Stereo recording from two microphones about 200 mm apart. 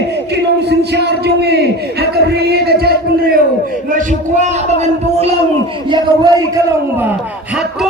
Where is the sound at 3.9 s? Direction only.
35° right (ahead or behind).